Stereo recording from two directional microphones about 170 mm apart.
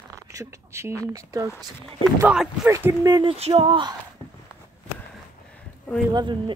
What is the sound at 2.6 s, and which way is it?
Speech, 15° right (ahead or behind).